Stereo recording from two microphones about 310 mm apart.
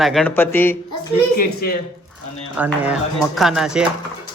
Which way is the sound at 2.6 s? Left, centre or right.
Centre.